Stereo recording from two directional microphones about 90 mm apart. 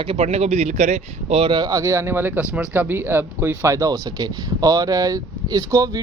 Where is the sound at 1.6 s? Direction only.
40° right (ahead or behind).